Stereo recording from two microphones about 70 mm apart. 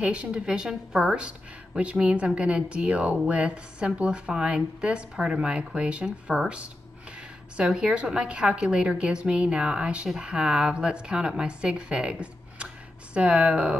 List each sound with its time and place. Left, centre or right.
0.0 s speech: centre